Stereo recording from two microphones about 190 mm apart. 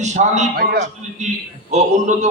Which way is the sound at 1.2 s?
40° right (ahead or behind).